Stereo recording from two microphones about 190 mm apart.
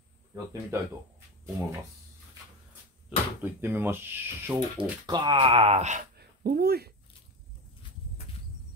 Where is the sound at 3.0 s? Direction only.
10° right (ahead or behind).